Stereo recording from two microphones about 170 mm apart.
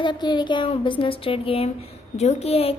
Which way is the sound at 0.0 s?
25° left (ahead or behind).